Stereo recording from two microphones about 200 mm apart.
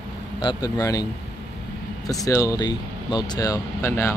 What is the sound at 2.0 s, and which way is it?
Speech, 15° left (ahead or behind).